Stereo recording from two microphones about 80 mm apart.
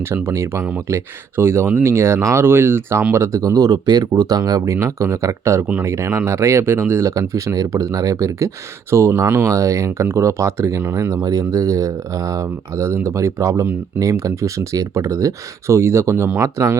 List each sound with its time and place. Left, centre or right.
0.0 s speech: right
11.1 s speech: right